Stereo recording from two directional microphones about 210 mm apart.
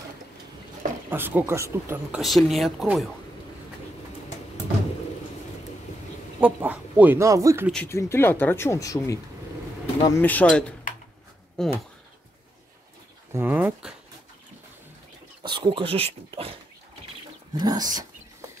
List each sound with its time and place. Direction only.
1.1 s speech: 10° right (ahead or behind)
6.4 s speech: 5° right (ahead or behind)
7.7 s speech: 10° left (ahead or behind)
10.2 s speech: 5° left (ahead or behind)
13.3 s speech: 10° right (ahead or behind)
15.4 s speech: 20° right (ahead or behind)
17.6 s speech: 20° right (ahead or behind)